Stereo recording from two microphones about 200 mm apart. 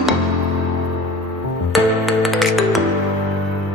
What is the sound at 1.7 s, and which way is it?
Music, centre (ahead or behind).